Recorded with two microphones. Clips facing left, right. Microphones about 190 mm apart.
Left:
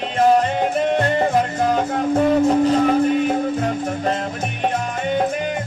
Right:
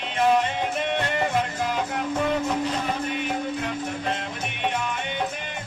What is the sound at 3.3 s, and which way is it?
Music, 40° left (ahead or behind).